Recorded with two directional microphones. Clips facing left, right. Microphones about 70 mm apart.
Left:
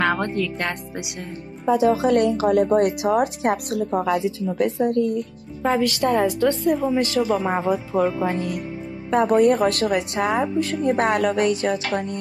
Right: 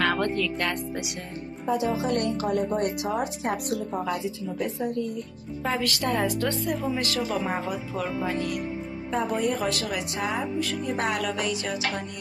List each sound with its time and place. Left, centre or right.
0.0 s speech: centre
1.9 s speech: left
5.6 s speech: left
9.1 s a woman's voice: left